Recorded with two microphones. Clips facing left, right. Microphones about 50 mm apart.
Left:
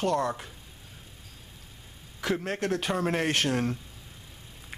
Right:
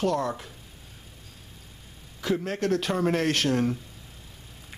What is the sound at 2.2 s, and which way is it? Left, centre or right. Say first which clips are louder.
A man's voice: right 2 dB; centre.